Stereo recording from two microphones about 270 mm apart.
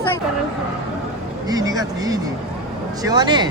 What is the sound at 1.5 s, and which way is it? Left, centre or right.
Speech, centre.